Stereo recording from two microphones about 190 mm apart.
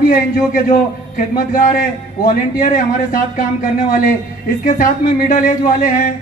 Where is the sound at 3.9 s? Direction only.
50° left (ahead or behind).